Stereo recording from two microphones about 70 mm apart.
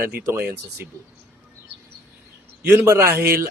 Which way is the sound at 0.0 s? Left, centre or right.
Right.